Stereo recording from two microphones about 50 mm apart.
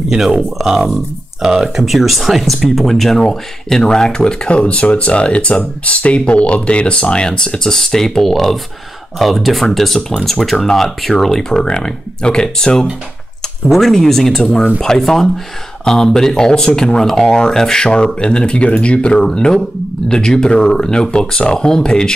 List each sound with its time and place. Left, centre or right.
0.6 s speech: centre
1.8 s speech: centre
13.7 s speech: centre